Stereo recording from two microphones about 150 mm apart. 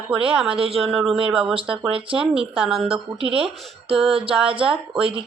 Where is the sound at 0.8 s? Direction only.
Centre (ahead or behind).